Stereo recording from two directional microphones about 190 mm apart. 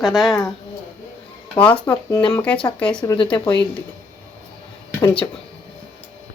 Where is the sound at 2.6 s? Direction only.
25° left (ahead or behind).